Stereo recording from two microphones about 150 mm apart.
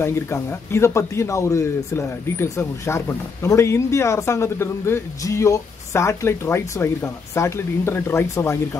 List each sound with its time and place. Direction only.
0.0 s speech: 15° left (ahead or behind)